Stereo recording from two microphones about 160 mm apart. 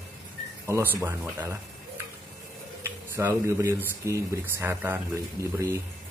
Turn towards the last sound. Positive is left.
turn(degrees=-15)  # may be behind; listen again after turning